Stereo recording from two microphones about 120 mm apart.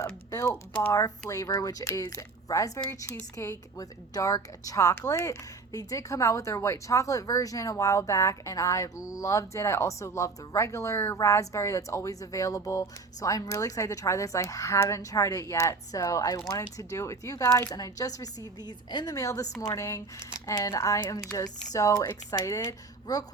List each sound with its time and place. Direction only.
0.0 s typing: 25° left (ahead or behind)
0.4 s speech: 10° left (ahead or behind)
1.3 s a woman's voice: 30° left (ahead or behind)